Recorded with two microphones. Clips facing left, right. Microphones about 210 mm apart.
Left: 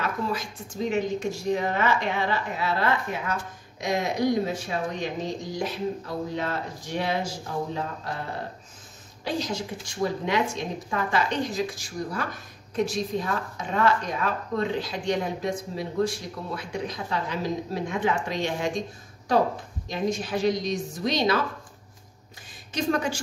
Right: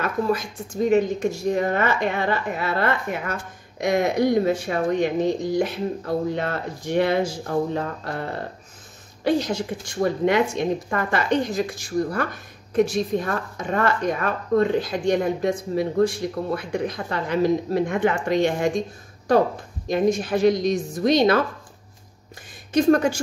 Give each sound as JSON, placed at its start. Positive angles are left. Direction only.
{"t": 0.8, "sound": "speech", "side_deg": -50}
{"t": 9.2, "sound": "speech", "side_deg": -55}
{"t": 19.9, "sound": "a woman's voice", "side_deg": -50}
{"t": 22.7, "sound": "a woman's voice", "side_deg": -50}